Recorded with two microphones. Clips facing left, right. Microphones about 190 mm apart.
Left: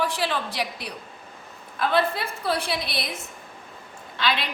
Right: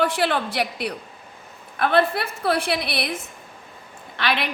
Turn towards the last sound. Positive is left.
turn(degrees=-60)  # may be behind; listen again after turning